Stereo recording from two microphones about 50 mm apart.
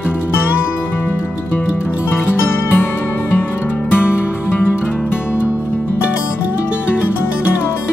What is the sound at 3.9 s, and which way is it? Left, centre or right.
Music, left.